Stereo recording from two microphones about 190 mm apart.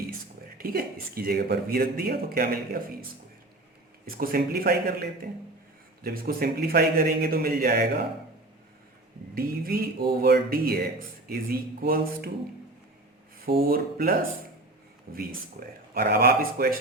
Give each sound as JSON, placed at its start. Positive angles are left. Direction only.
{"t": 0.6, "sound": "speech", "side_deg": -50}
{"t": 4.0, "sound": "speech", "side_deg": -50}
{"t": 9.3, "sound": "speech", "side_deg": -50}
{"t": 13.6, "sound": "speech", "side_deg": -50}